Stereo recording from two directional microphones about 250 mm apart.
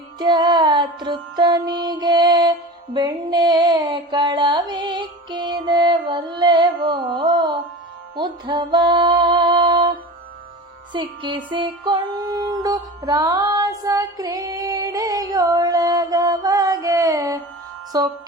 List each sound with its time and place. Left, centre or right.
0.2 s music: centre